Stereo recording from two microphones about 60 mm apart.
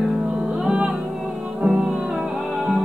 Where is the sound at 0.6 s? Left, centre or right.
Centre.